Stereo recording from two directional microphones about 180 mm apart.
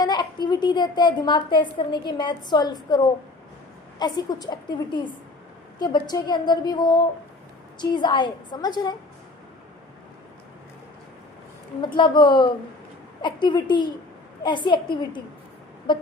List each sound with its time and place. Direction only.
0.0 s a woman's voice: 25° left (ahead or behind)
11.9 s a woman's voice: 25° left (ahead or behind)